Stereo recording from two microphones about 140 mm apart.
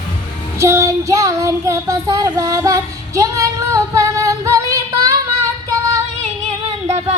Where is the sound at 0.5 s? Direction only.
20° right (ahead or behind).